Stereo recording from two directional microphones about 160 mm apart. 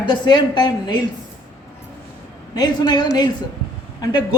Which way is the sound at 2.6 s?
25° left (ahead or behind).